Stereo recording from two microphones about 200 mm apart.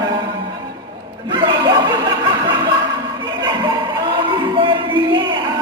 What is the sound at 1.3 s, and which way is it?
Chuckle, 20° right (ahead or behind).